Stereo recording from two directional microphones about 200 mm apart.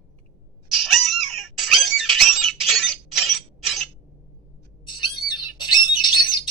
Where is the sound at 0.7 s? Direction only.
Centre (ahead or behind).